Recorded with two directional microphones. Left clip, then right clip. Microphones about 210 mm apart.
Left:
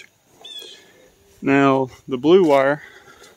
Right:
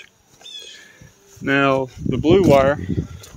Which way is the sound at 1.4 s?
25° left (ahead or behind).